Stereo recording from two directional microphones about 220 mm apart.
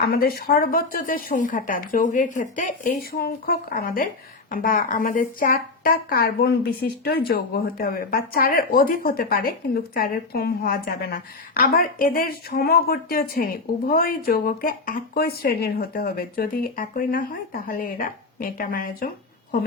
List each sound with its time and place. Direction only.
0.1 s speech: 45° left (ahead or behind)